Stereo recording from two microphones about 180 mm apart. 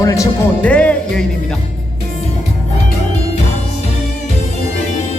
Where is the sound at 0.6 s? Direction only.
5° left (ahead or behind).